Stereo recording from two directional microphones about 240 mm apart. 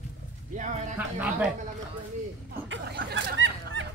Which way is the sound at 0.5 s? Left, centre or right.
Right.